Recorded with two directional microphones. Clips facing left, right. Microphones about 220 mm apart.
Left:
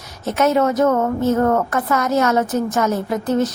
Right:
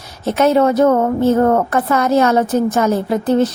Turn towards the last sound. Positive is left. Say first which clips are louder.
# right 4 dB
turn(degrees=-30)  # may be behind; listen again after turning